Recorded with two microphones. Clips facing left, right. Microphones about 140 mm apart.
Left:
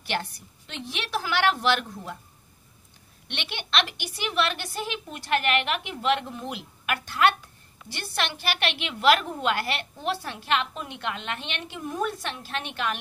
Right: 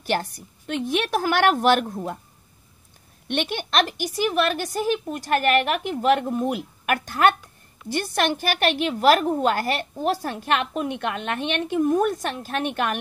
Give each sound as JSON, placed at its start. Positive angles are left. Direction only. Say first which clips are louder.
{"t": 0.0, "sound": "a woman's voice", "louder": "right 6 dB", "side_deg": -40}
{"t": 3.3, "sound": "a woman's voice", "louder": "right 9 dB", "side_deg": -45}